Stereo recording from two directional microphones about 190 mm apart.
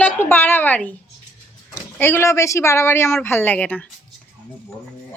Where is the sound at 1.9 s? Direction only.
10° left (ahead or behind).